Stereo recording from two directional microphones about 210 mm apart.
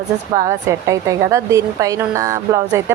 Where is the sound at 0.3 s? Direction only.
15° right (ahead or behind).